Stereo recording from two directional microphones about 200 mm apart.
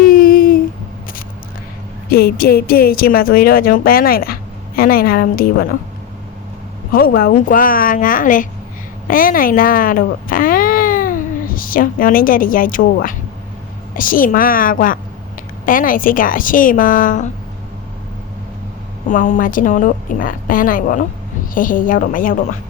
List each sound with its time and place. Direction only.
0.0 s a sound: 45° left (ahead or behind)
2.0 s a woman's voice: 50° left (ahead or behind)
6.9 s a woman's voice: 50° left (ahead or behind)
19.0 s a woman's voice: 40° left (ahead or behind)